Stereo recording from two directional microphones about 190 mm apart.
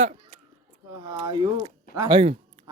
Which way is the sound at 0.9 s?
20° right (ahead or behind).